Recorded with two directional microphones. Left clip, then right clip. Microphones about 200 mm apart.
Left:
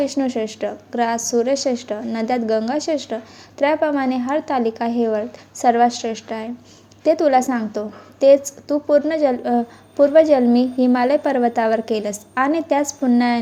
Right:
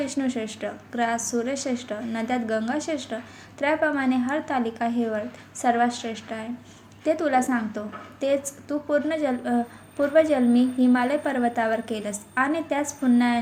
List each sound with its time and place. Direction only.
0.0 s a woman's voice: 40° left (ahead or behind)
4.9 s a woman's voice: 35° left (ahead or behind)
5.5 s a woman's voice: 45° left (ahead or behind)